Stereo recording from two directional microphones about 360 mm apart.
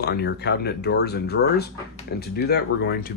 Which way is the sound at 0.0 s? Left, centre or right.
Left.